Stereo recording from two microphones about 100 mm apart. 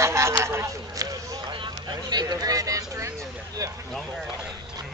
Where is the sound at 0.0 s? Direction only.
30° right (ahead or behind).